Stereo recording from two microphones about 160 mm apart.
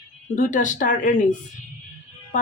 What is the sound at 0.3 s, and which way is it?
Speech, 55° left (ahead or behind).